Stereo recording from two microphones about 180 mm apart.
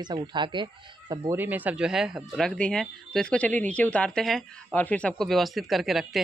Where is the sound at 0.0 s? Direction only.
25° right (ahead or behind).